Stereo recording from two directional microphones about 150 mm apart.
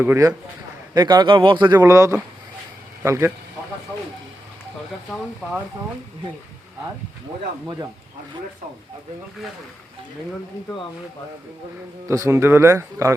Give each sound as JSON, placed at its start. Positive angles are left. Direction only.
{"t": 0.0, "sound": "speech", "side_deg": -20}
{"t": 0.9, "sound": "speech", "side_deg": -30}
{"t": 1.8, "sound": "speech", "side_deg": -20}
{"t": 5.0, "sound": "speech", "side_deg": 0}
{"t": 12.0, "sound": "speech", "side_deg": -20}